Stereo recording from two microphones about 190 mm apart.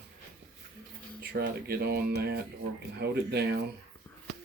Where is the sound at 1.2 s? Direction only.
55° right (ahead or behind).